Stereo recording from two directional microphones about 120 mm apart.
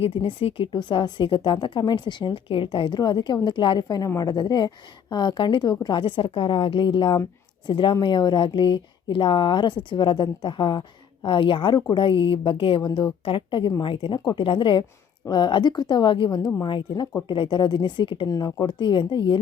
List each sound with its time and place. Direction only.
0.0 s a woman's voice: 45° left (ahead or behind)
18.3 s speech: 30° left (ahead or behind)